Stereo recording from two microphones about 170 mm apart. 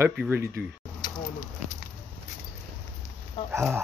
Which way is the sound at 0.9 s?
25° left (ahead or behind).